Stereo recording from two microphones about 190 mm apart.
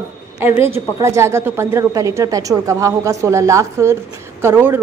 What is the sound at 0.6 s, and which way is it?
A woman's voice, 10° right (ahead or behind).